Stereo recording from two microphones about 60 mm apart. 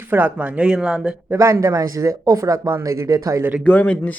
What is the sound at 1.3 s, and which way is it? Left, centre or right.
Speech, right.